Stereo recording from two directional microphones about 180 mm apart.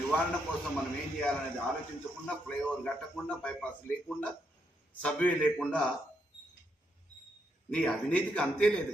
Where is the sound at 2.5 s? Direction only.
5° left (ahead or behind).